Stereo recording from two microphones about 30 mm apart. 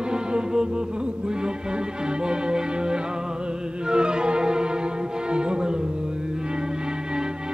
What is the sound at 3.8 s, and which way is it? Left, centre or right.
Music, right.